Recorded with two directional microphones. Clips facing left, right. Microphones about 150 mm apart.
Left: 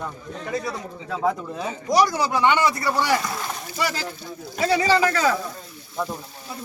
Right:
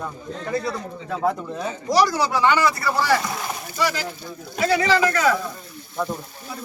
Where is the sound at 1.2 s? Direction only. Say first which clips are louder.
Even; centre (ahead or behind).